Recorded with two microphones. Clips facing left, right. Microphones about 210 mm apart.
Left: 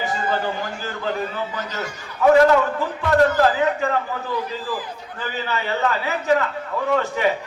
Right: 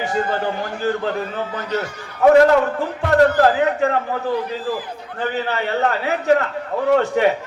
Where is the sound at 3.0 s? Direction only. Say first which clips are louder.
Right 3 dB; 50° right (ahead or behind).